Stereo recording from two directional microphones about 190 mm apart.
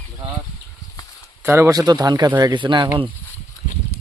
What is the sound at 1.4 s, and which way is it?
Speech, 15° right (ahead or behind).